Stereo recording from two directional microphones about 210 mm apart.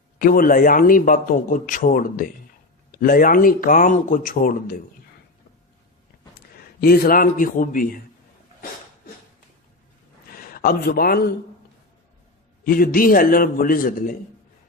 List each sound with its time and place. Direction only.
0.2 s a man's voice: 45° left (ahead or behind)
6.7 s a man's voice: 45° left (ahead or behind)
10.3 s a man's voice: 45° left (ahead or behind)
12.6 s a man's voice: 45° left (ahead or behind)